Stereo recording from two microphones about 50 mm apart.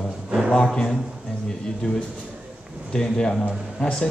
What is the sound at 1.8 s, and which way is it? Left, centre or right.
A man's voice, centre.